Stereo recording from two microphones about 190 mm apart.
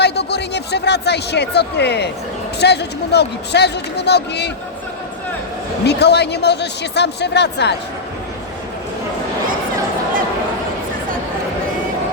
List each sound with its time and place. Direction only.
0.0 s speech: 60° left (ahead or behind)
5.8 s speech: 60° left (ahead or behind)